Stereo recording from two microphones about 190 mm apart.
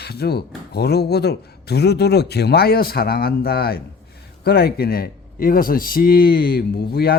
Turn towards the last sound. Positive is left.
turn(degrees=55)  # may be behind; listen again after turning